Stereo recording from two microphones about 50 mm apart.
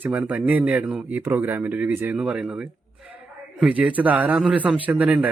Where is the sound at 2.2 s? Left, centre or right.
Centre.